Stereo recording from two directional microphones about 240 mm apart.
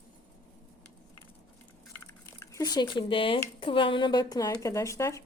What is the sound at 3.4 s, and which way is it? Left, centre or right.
Speech, left.